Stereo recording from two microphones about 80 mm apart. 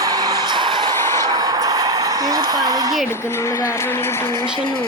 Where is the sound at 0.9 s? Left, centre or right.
Left.